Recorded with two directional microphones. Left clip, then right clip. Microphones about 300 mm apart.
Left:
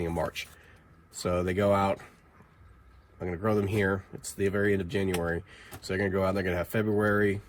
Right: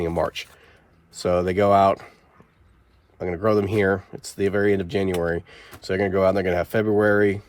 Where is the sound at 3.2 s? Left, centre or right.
Right.